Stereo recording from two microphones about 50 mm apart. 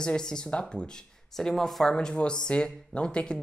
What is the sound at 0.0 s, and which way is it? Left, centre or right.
Speech, centre.